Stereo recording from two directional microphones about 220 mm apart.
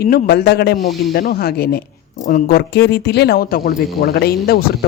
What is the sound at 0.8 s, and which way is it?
Speech, centre (ahead or behind).